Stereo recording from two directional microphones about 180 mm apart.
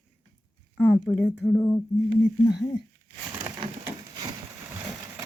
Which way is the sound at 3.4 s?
25° right (ahead or behind).